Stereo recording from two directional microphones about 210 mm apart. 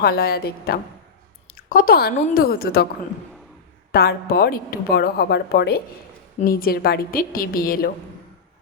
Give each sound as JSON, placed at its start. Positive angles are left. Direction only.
{"t": 0.0, "sound": "a woman's voice", "side_deg": 50}
{"t": 3.9, "sound": "a woman's voice", "side_deg": 50}